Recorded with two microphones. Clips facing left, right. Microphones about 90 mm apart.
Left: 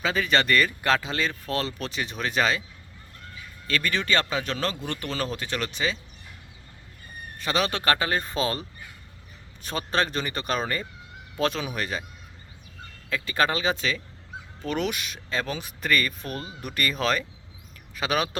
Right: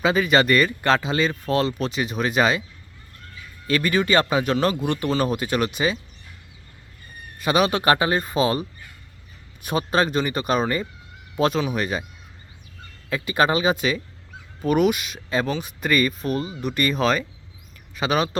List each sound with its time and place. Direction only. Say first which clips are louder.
0.0 s speech: right 6 dB; 5° right (ahead or behind)
3.7 s speech: right 6 dB; 10° right (ahead or behind)
7.3 s speech: right 6 dB; 10° right (ahead or behind)
9.6 s speech: right 5 dB; 10° right (ahead or behind)
13.1 s speech: right 4 dB; 15° right (ahead or behind)